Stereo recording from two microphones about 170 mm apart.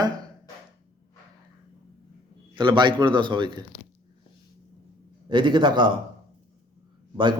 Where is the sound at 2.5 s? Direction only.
25° right (ahead or behind).